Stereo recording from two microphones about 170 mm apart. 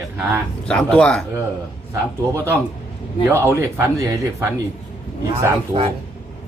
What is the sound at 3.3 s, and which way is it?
Speech, 15° right (ahead or behind).